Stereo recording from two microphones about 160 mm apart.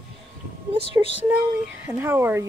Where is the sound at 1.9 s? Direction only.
15° right (ahead or behind).